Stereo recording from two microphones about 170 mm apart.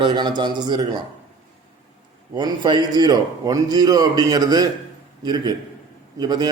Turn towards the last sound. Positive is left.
turn(degrees=-25)  # may be behind; listen again after turning